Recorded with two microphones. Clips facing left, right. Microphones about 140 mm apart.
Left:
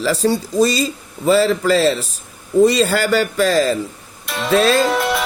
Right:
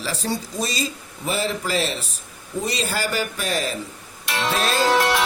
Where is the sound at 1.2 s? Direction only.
90° left.